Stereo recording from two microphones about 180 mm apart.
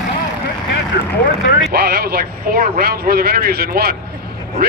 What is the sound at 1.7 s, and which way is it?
A man's voice, 60° right (ahead or behind).